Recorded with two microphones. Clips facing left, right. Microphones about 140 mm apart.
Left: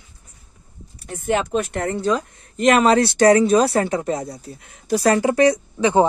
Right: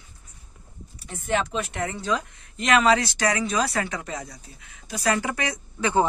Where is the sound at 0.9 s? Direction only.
50° left (ahead or behind).